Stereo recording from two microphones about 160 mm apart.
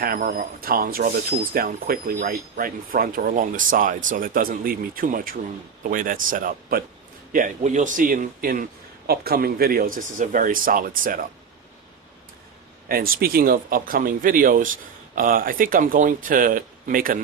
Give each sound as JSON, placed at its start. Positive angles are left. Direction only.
{"t": 0.0, "sound": "speech", "side_deg": -65}
{"t": 7.3, "sound": "speech", "side_deg": -50}
{"t": 9.0, "sound": "speech", "side_deg": -70}
{"t": 12.9, "sound": "speech", "side_deg": -65}